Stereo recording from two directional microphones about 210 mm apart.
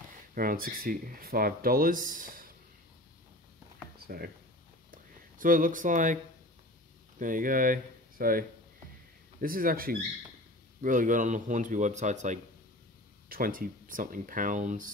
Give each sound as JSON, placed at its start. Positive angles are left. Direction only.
{"t": 0.3, "sound": "speech", "side_deg": -45}
{"t": 4.1, "sound": "speech", "side_deg": -45}
{"t": 4.9, "sound": "a sound", "side_deg": -40}
{"t": 7.2, "sound": "speech", "side_deg": -40}